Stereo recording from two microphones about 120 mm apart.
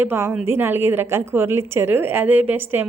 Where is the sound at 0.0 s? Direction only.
20° right (ahead or behind).